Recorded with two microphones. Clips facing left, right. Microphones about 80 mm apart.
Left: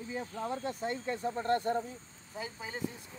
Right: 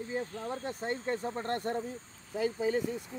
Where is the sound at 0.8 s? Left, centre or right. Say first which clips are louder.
Right 4 dB; right.